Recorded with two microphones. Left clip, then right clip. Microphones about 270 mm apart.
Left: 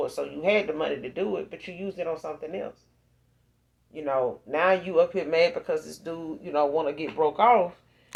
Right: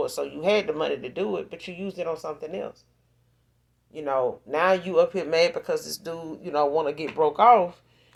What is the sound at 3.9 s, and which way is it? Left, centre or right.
Speech, right.